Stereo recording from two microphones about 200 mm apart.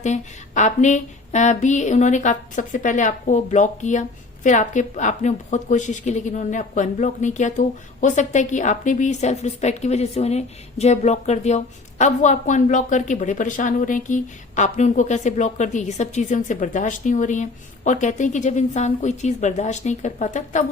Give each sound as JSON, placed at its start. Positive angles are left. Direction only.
{"t": 0.0, "sound": "a woman's voice", "side_deg": 35}